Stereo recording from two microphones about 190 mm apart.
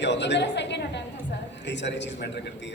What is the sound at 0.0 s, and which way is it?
A woman's voice, 65° left (ahead or behind).